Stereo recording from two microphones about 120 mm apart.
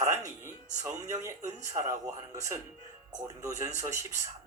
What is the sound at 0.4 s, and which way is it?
Speech, 25° right (ahead or behind).